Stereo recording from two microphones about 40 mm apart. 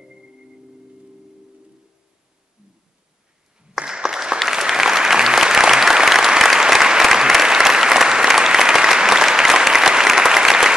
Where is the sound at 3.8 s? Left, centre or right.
Centre.